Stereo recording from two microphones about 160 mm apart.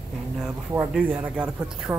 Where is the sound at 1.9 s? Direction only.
20° right (ahead or behind).